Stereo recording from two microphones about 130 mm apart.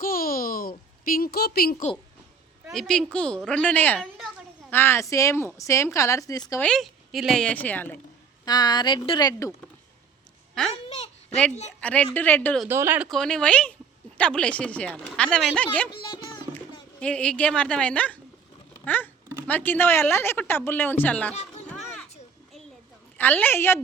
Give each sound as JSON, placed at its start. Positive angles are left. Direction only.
{"t": 0.0, "sound": "a sound", "side_deg": 90}
{"t": 2.7, "sound": "a woman's voice", "side_deg": 5}
{"t": 6.6, "sound": "speech", "side_deg": 5}
{"t": 8.4, "sound": "speech", "side_deg": 30}
{"t": 10.7, "sound": "a sound", "side_deg": 55}
{"t": 11.8, "sound": "a woman's voice", "side_deg": 10}
{"t": 12.6, "sound": "speech", "side_deg": -20}
{"t": 13.1, "sound": "speech", "side_deg": 5}
{"t": 17.0, "sound": "speech", "side_deg": 10}
{"t": 23.1, "sound": "speech", "side_deg": 15}